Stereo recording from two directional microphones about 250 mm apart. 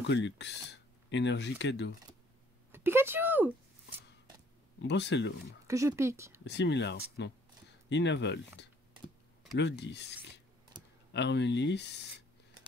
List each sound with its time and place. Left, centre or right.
0.0 s speech: left
2.7 s a sound: centre
4.8 s speech: left
5.7 s speech: centre
6.4 s speech: left
10.8 s computer keyboard: centre
11.1 s speech: left